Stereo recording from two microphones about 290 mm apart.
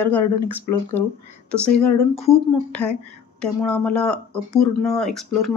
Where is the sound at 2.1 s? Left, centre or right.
Left.